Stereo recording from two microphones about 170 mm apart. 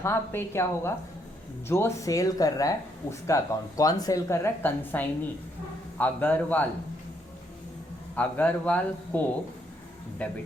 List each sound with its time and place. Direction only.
0.0 s speech: 15° left (ahead or behind)
8.1 s speech: 10° left (ahead or behind)